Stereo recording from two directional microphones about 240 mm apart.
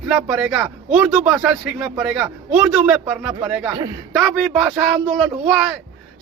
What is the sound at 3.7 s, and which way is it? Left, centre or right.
A man's voice, centre.